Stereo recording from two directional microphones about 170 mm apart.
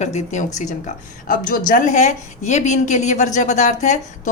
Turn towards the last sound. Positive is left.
turn(degrees=45)  # may be behind; listen again after turning